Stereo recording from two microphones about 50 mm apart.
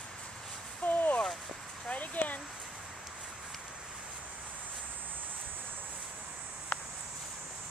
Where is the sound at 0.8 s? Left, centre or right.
Left.